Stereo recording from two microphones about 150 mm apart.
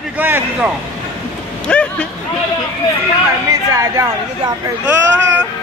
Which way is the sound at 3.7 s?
20° right (ahead or behind).